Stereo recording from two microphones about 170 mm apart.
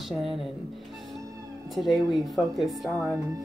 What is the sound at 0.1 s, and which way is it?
Speech, centre (ahead or behind).